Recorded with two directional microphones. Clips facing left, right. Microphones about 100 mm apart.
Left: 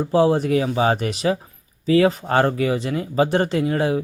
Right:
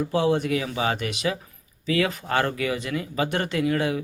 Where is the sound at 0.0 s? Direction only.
35° left (ahead or behind).